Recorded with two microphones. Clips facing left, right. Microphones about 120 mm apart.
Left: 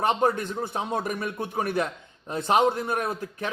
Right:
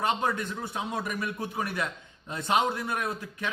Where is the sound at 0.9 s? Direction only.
50° left (ahead or behind).